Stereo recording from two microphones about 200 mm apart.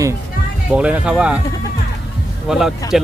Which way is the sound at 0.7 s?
5° right (ahead or behind).